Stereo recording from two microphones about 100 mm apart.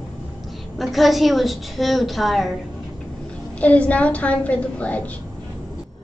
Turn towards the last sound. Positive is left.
turn(degrees=15)  # may be behind; listen again after turning